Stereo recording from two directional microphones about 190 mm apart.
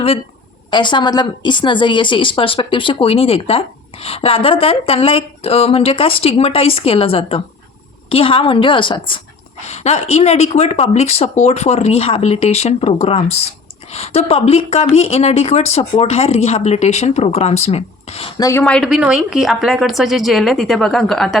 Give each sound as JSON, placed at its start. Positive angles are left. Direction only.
{"t": 0.7, "sound": "a woman's voice", "side_deg": 25}
{"t": 18.6, "sound": "a woman's voice", "side_deg": 0}